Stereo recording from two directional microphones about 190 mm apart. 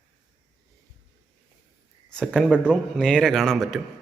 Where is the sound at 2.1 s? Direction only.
5° left (ahead or behind).